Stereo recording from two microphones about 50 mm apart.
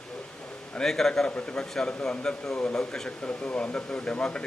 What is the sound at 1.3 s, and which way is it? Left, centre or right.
A man's voice, left.